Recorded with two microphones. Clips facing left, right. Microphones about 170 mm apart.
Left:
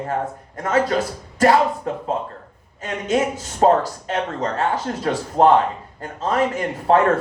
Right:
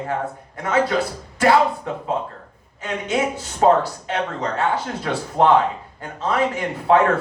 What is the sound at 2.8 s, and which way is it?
Speech, 45° left (ahead or behind).